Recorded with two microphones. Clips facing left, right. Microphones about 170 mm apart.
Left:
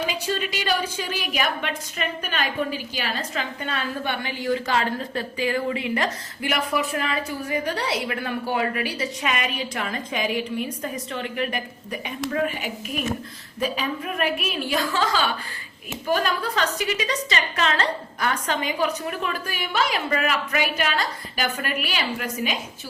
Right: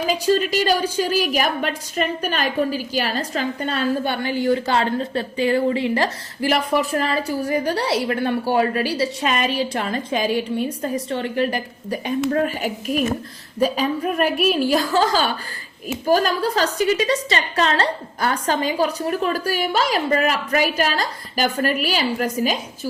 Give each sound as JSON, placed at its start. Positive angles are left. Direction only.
{"t": 0.1, "sound": "a woman's voice", "side_deg": -40}